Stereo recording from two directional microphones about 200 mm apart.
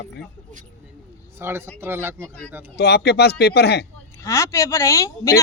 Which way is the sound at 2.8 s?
55° left (ahead or behind).